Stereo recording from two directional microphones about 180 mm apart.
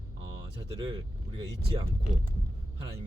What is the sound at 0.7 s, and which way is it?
Speech, 30° right (ahead or behind).